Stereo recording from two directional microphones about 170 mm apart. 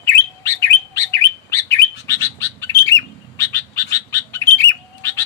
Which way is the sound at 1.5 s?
15° left (ahead or behind).